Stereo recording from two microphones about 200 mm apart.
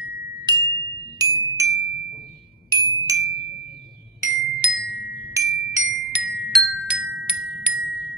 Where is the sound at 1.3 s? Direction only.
15° right (ahead or behind).